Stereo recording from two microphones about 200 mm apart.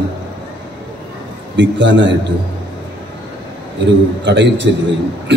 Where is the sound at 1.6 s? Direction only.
65° right (ahead or behind).